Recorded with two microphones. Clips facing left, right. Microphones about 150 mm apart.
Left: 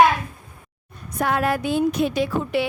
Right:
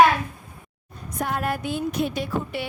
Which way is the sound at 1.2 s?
90° left.